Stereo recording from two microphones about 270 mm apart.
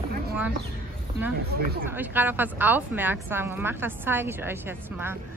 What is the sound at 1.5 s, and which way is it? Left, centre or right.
Speech, right.